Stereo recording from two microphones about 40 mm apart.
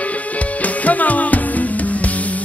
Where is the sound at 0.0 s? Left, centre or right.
Left.